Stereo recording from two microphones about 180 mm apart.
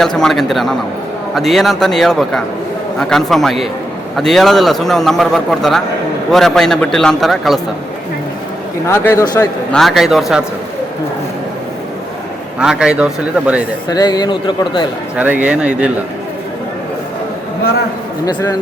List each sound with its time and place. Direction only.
0.0 s a man's voice: 5° left (ahead or behind)
8.9 s a man's voice: 15° left (ahead or behind)
9.7 s a man's voice: centre (ahead or behind)
12.5 s a man's voice: 5° right (ahead or behind)
13.9 s a man's voice: 20° left (ahead or behind)
15.1 s speech: 10° right (ahead or behind)